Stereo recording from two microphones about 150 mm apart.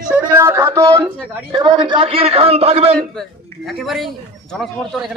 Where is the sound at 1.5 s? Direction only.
30° right (ahead or behind).